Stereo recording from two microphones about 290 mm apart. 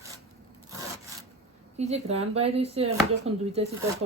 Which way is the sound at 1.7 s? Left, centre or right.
Right.